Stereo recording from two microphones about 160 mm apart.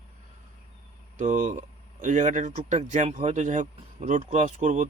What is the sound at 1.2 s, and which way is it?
Speech, 50° right (ahead or behind).